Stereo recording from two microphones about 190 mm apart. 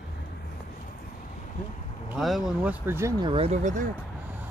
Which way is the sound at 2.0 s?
Centre (ahead or behind).